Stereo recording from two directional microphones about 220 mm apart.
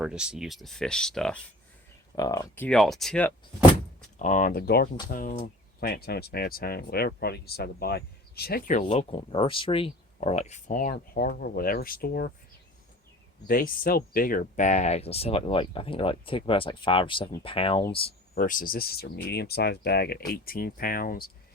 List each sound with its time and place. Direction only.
0.0 s speech: 5° right (ahead or behind)
2.1 s speech: 15° left (ahead or behind)
2.6 s speech: centre (ahead or behind)
4.2 s speech: 35° left (ahead or behind)
13.5 s speech: 40° left (ahead or behind); by 17.8 s 25° left (ahead or behind)
18.3 s speech: 40° left (ahead or behind)